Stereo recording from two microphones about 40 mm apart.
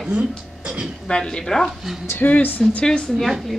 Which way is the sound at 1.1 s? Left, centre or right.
Left.